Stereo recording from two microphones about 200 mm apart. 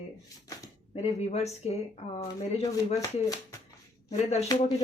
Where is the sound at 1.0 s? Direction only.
30° left (ahead or behind).